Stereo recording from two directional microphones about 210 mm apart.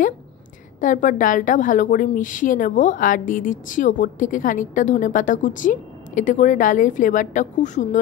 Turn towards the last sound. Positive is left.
turn(degrees=35)  # may be behind; listen again after turning